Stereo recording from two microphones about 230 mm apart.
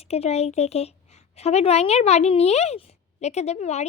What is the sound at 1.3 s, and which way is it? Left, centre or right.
A woman's voice, left.